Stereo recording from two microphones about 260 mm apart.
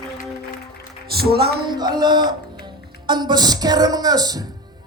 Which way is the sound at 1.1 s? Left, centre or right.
Right.